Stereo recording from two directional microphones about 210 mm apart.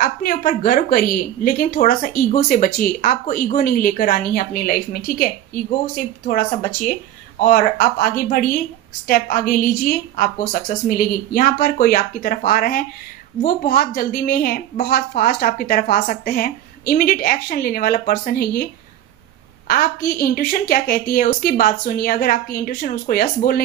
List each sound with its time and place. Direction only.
0.0 s a woman's voice: 45° left (ahead or behind)
19.7 s a woman's voice: 45° left (ahead or behind)